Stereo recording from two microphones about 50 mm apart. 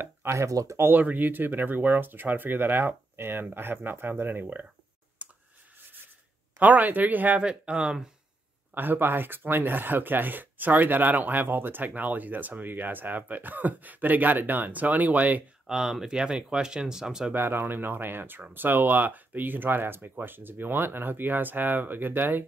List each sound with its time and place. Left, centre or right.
0.3 s speech: right
0.8 s speech: right
5.2 s a sound: right
6.6 s speech: right
7.4 s speech: centre
8.7 s speech: right
15.6 s speech: centre
17.3 s speech: right